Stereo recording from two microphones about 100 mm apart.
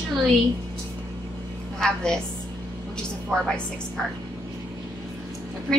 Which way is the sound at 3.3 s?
5° left (ahead or behind).